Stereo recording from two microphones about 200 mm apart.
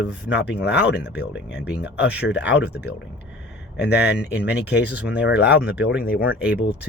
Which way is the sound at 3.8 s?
55° left (ahead or behind).